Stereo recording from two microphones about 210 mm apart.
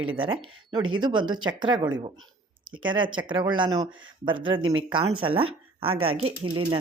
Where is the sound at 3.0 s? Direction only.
20° right (ahead or behind).